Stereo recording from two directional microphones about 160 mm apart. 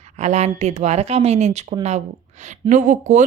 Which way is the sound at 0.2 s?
45° right (ahead or behind).